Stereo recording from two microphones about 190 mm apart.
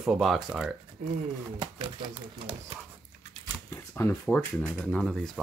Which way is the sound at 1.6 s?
25° right (ahead or behind).